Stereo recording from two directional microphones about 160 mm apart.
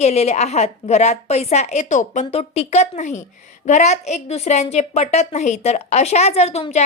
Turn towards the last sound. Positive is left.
turn(degrees=45)  # may be behind; listen again after turning